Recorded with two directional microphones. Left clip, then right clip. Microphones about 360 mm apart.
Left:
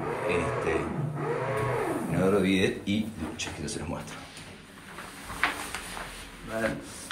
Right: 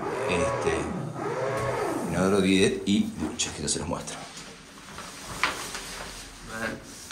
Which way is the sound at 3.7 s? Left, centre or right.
Centre.